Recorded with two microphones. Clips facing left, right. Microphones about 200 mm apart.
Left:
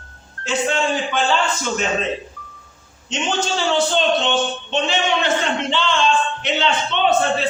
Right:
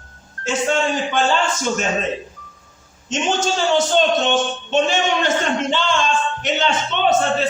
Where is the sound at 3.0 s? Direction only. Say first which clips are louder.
Right 2 dB; 45° right (ahead or behind).